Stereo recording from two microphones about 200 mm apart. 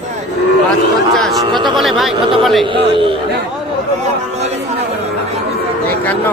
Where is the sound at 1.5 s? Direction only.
20° right (ahead or behind).